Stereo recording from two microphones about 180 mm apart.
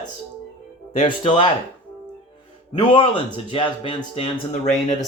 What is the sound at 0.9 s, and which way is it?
Speech, 30° left (ahead or behind).